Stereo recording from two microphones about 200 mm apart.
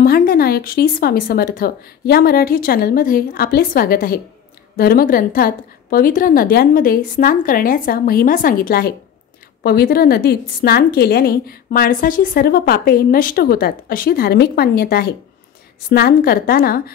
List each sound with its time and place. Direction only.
0.0 s a woman's voice: 45° left (ahead or behind)